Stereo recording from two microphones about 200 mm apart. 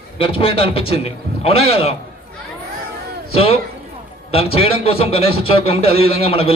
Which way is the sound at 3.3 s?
30° left (ahead or behind).